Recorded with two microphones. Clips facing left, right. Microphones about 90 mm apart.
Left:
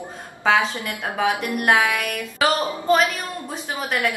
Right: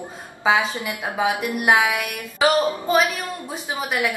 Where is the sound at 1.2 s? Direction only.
5° right (ahead or behind).